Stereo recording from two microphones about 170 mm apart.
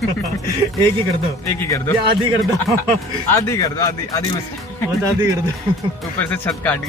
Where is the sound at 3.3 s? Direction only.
15° left (ahead or behind).